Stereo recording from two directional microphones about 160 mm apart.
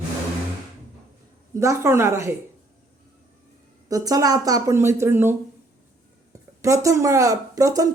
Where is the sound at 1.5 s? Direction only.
15° right (ahead or behind).